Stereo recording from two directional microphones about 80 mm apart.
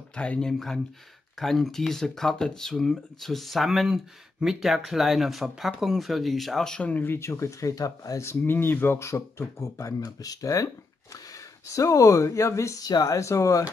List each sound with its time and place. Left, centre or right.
0.1 s speech: centre
7.2 s speech: left
8.4 s speech: left